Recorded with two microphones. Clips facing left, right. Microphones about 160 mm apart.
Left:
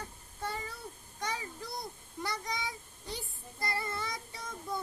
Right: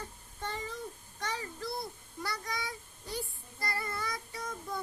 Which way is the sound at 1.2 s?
15° left (ahead or behind).